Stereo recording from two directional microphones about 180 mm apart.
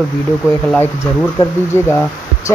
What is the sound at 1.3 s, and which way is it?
Speech, 15° left (ahead or behind).